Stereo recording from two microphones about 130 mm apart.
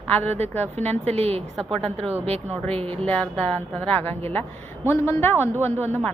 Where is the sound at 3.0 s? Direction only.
10° left (ahead or behind).